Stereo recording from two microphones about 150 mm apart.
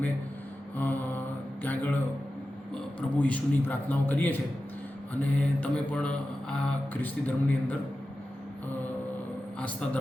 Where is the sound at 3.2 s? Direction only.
10° left (ahead or behind).